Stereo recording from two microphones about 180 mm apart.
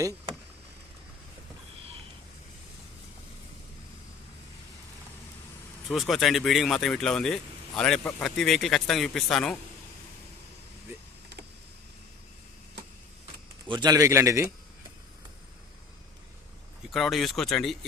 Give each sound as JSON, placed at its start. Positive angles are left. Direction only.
{"t": 5.9, "sound": "speech", "side_deg": 0}
{"t": 13.7, "sound": "a man's voice", "side_deg": -20}
{"t": 16.9, "sound": "speech", "side_deg": 0}